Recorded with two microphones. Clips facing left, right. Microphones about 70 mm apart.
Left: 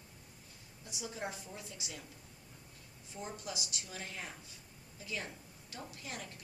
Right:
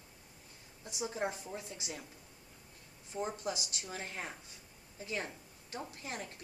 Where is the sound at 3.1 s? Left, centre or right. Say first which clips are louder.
Right 6 dB; right.